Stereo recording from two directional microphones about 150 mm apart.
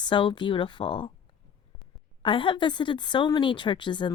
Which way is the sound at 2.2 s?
35° left (ahead or behind).